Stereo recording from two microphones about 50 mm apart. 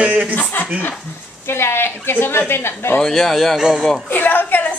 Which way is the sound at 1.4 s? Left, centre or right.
Left.